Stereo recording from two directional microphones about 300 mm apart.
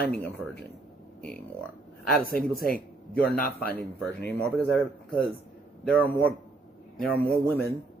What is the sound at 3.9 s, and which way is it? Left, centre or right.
Speech, centre.